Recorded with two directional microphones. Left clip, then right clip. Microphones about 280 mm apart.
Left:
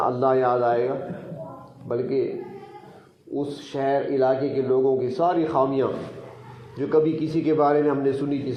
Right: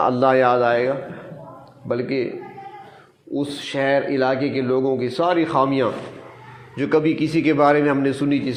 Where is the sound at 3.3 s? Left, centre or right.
Right.